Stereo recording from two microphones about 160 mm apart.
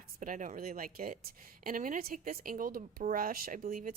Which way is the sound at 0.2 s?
50° right (ahead or behind).